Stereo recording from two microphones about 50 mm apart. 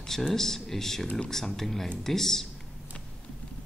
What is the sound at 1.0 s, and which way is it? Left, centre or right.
Speech, left.